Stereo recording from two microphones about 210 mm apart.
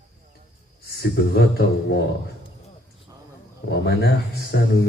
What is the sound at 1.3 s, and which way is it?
Speech, 50° left (ahead or behind).